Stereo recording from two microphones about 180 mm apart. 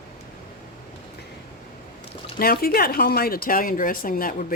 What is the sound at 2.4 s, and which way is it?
Speech, 55° left (ahead or behind).